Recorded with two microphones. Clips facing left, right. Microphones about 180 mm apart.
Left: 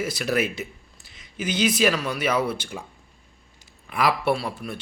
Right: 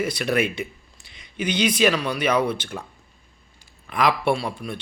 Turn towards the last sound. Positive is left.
turn(degrees=5)  # may be behind; listen again after turning